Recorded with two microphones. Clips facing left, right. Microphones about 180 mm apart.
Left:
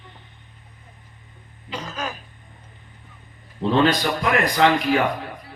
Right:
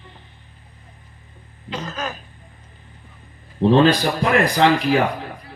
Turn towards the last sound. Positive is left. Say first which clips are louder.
# right 2 dB
turn(degrees=-35)  # may be behind; listen again after turning